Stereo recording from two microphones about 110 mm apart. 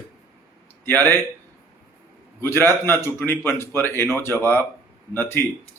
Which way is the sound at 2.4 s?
20° left (ahead or behind).